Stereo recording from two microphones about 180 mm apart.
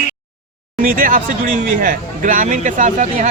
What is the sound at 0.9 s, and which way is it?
Speech, 50° right (ahead or behind).